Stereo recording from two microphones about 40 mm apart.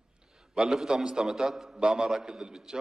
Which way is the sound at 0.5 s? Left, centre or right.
Centre.